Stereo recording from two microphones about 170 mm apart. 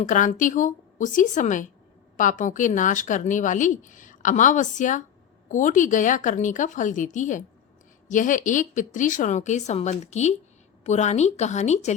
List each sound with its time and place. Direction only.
0.0 s speech: 50° left (ahead or behind)